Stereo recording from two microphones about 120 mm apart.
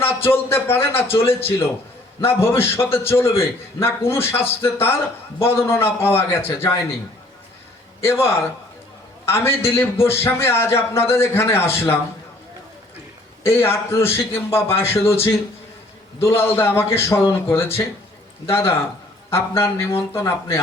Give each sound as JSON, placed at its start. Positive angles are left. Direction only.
{"t": 0.0, "sound": "a man's voice", "side_deg": 20}
{"t": 8.0, "sound": "a man's voice", "side_deg": 20}
{"t": 13.4, "sound": "a man's voice", "side_deg": 20}
{"t": 16.2, "sound": "a man's voice", "side_deg": 20}